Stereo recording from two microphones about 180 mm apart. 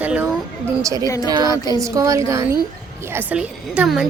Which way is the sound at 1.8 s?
20° right (ahead or behind).